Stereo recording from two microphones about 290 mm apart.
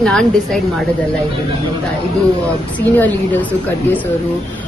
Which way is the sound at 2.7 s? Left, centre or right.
Centre.